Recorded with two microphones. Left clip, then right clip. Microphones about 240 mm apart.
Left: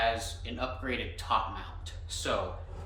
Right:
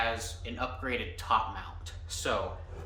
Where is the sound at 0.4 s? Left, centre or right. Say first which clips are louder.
Right 2 dB; centre.